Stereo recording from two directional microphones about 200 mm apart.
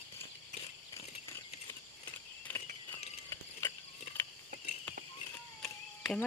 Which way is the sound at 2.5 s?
10° left (ahead or behind).